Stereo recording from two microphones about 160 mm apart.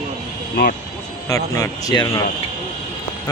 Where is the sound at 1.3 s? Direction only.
20° left (ahead or behind).